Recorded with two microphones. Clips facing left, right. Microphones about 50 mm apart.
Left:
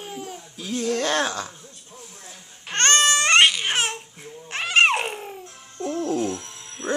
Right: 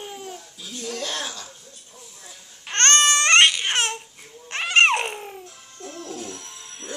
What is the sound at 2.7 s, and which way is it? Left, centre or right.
Baby cry, centre.